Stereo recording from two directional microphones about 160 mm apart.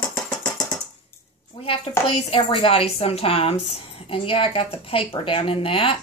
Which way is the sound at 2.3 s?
35° left (ahead or behind).